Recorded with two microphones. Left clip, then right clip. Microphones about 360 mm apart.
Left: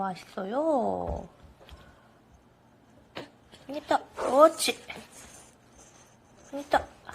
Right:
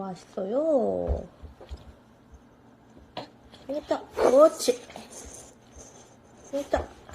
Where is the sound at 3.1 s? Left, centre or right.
Centre.